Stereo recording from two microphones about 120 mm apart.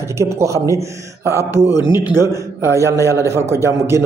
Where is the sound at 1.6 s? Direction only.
5° left (ahead or behind).